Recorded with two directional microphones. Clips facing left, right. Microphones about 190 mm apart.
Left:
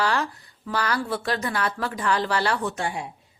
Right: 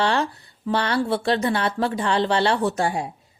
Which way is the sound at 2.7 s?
35° right (ahead or behind).